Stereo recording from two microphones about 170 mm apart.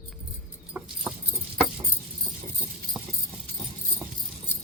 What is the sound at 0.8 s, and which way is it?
Dog, 10° right (ahead or behind).